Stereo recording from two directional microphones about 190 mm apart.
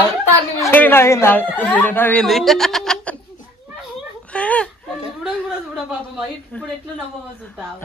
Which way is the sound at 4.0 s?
5° left (ahead or behind).